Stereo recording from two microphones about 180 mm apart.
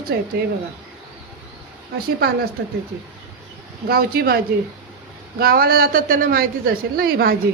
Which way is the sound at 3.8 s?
55° right (ahead or behind).